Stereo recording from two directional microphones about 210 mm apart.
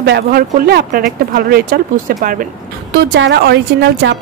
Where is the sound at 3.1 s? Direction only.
55° right (ahead or behind).